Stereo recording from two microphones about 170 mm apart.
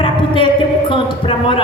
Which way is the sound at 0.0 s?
30° left (ahead or behind).